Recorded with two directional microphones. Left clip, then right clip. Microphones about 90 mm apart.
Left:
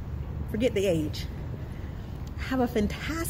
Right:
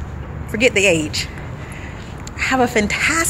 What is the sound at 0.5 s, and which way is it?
Speech, 45° left (ahead or behind).